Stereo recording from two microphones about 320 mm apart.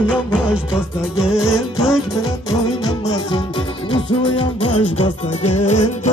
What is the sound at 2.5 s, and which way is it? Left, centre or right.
Music, centre.